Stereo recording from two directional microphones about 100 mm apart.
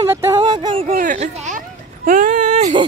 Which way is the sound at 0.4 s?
55° right (ahead or behind).